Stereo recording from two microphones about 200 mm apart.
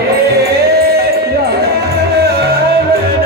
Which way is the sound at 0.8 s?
50° right (ahead or behind).